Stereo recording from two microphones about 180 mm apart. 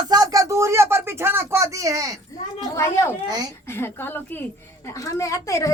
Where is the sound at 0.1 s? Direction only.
20° right (ahead or behind).